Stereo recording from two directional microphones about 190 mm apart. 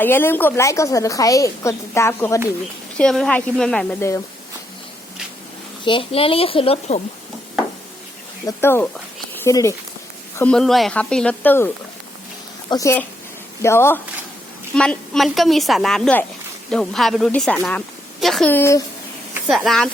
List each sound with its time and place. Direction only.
0.0 s a woman's voice: 10° left (ahead or behind)
3.0 s a woman's voice: 5° left (ahead or behind)
5.8 s a child's voice: 25° left (ahead or behind)
8.4 s a woman's voice: 10° left (ahead or behind)
12.7 s a woman's voice: 15° left (ahead or behind)
19.5 s a woman's voice: centre (ahead or behind)